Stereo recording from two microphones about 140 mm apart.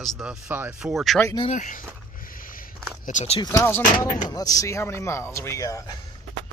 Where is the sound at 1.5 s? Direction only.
70° left (ahead or behind).